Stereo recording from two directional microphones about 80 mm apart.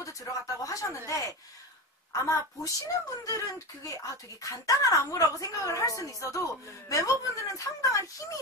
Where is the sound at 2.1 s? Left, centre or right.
Left.